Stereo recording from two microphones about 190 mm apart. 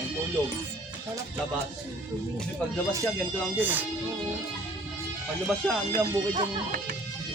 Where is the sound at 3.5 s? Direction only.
10° right (ahead or behind).